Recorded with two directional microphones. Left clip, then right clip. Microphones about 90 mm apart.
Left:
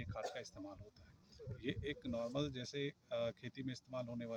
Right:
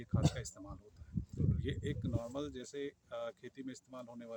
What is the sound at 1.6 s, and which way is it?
Speech, 35° right (ahead or behind).